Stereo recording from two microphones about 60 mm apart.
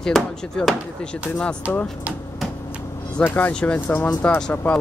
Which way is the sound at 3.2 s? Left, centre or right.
Left.